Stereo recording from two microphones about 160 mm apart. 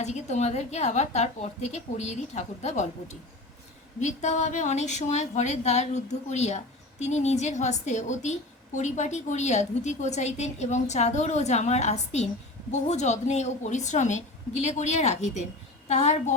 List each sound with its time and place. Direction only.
0.0 s a woman's voice: 45° left (ahead or behind)